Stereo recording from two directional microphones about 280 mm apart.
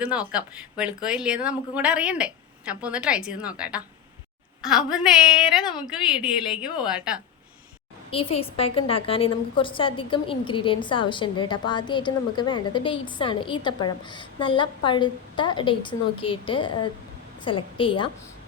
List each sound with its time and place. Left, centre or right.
0.0 s speech: centre
8.1 s a woman's voice: centre